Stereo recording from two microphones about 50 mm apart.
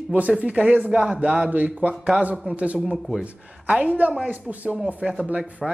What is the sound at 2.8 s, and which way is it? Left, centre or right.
Speech, centre.